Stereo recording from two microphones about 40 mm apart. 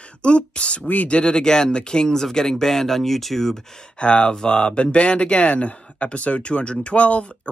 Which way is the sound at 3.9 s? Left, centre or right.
Left.